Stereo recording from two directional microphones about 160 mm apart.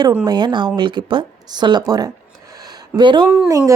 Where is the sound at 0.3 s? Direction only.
30° right (ahead or behind).